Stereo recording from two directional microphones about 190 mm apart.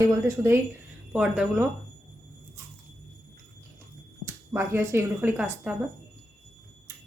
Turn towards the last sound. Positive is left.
turn(degrees=-5)  # may be behind; listen again after turning